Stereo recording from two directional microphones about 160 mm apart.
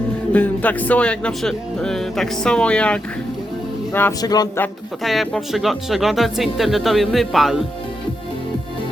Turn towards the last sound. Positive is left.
turn(degrees=0)  # may be behind; listen again after turning